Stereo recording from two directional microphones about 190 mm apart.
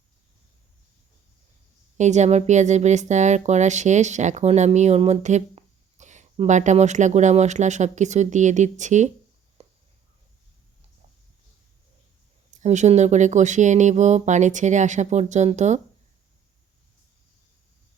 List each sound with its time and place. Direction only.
2.0 s speech: 40° right (ahead or behind)
9.6 s a sound: 35° right (ahead or behind)
12.6 s speech: 35° right (ahead or behind)